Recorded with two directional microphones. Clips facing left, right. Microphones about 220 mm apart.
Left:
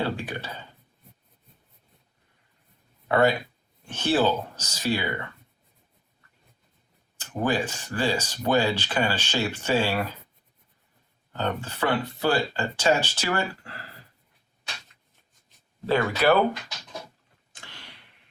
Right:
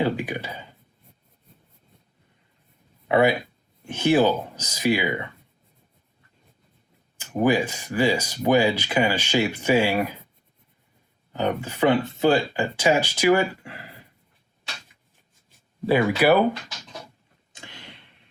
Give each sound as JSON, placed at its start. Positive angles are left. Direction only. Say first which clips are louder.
{"t": 0.0, "sound": "speech", "louder": "right 5 dB", "side_deg": -15}
{"t": 3.1, "sound": "speech", "louder": "right 2 dB", "side_deg": -10}
{"t": 7.2, "sound": "speech", "louder": "right 5 dB", "side_deg": -10}
{"t": 11.3, "sound": "speech", "louder": "right 4 dB", "side_deg": -15}
{"t": 15.9, "sound": "speech", "louder": "right 3 dB", "side_deg": -15}
{"t": 17.6, "sound": "a sound", "louder": "right 4 dB", "side_deg": -20}